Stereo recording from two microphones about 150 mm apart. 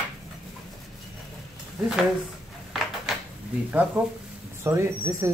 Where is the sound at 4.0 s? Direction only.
15° right (ahead or behind).